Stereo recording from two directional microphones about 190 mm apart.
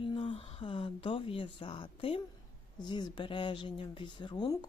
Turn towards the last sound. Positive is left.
turn(degrees=25)  # may be behind; listen again after turning